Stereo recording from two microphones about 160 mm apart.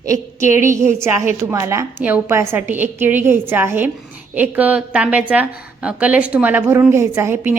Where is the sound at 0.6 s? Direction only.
15° right (ahead or behind).